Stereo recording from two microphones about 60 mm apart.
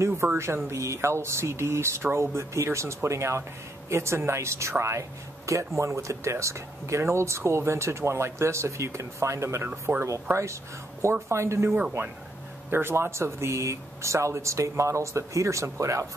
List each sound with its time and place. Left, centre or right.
0.0 s speech: right
9.9 s speech: right
10.3 s speech: right